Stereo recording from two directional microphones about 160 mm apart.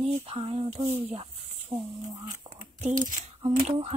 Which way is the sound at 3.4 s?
40° right (ahead or behind).